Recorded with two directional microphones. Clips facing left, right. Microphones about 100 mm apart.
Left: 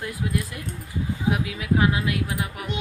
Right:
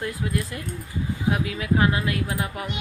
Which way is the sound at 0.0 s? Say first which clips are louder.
Right 1 dB; 10° left (ahead or behind).